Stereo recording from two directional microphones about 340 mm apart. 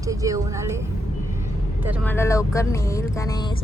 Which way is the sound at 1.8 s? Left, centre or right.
Centre.